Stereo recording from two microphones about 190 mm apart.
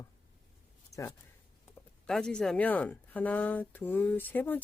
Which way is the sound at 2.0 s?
5° left (ahead or behind).